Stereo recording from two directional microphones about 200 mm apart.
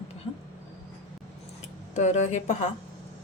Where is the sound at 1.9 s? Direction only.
35° left (ahead or behind).